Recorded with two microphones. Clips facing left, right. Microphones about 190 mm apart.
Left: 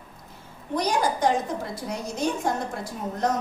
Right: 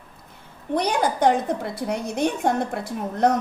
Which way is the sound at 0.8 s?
60° right (ahead or behind).